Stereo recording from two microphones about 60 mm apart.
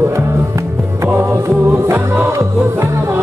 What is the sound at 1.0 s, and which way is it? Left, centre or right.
Music, right.